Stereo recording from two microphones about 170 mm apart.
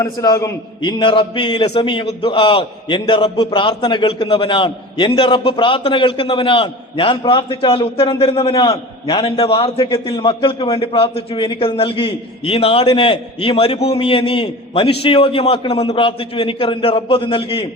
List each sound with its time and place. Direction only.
0.0 s a man's voice: 20° left (ahead or behind)
8.5 s a man's voice: 20° left (ahead or behind)
9.0 s a man's voice: 35° left (ahead or behind)